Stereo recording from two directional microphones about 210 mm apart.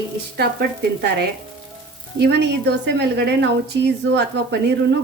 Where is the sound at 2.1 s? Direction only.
55° right (ahead or behind).